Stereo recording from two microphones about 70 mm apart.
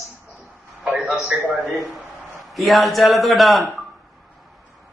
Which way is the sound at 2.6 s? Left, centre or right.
Centre.